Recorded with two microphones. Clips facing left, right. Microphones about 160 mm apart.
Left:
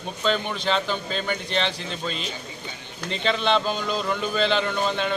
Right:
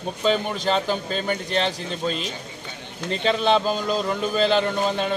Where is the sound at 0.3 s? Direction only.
40° right (ahead or behind).